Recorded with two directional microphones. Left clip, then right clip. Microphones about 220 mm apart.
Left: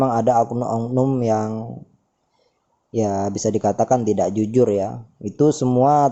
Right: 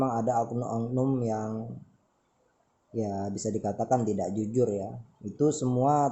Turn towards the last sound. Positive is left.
turn(degrees=30)  # may be behind; listen again after turning